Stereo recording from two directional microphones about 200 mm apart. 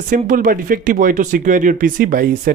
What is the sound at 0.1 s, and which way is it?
Speech, 45° right (ahead or behind).